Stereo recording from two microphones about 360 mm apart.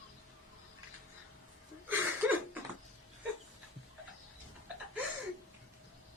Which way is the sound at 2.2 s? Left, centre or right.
Centre.